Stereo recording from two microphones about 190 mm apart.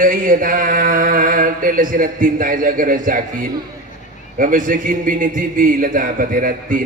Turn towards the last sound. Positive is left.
turn(degrees=-45)  # may be behind; listen again after turning